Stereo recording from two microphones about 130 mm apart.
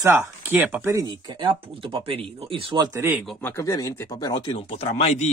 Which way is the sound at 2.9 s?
20° right (ahead or behind).